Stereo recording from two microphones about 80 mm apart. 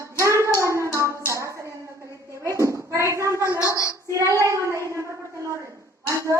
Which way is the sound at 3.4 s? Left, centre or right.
Left.